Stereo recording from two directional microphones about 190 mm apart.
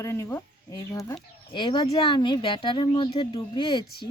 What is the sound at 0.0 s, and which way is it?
Speech, 15° left (ahead or behind).